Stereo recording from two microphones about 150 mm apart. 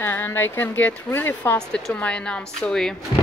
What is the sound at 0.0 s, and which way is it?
Speech, 15° left (ahead or behind).